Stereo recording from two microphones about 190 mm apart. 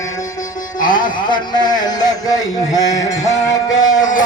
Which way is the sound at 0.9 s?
25° left (ahead or behind).